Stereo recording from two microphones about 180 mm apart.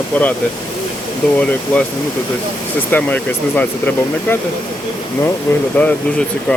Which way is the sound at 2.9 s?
10° left (ahead or behind).